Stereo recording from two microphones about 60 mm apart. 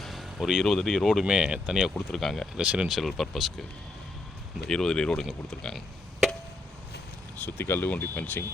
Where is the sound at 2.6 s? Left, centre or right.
Centre.